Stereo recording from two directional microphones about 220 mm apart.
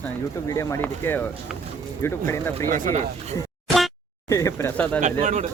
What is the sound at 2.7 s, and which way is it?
Speech, 35° right (ahead or behind).